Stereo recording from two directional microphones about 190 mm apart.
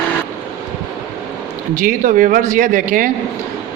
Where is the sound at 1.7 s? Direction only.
45° right (ahead or behind).